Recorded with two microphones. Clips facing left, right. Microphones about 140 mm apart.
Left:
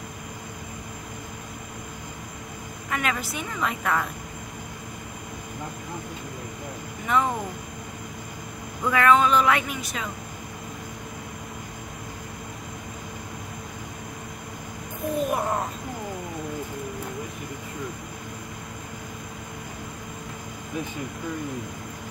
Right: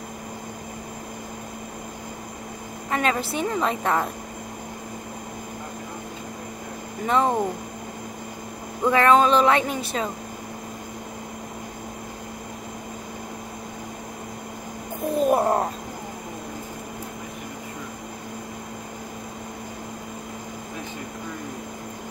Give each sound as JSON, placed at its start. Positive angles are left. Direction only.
{"t": 2.9, "sound": "speech", "side_deg": -30}
{"t": 7.1, "sound": "speech", "side_deg": -30}
{"t": 8.8, "sound": "speech", "side_deg": -30}
{"t": 15.1, "sound": "a sound", "side_deg": -30}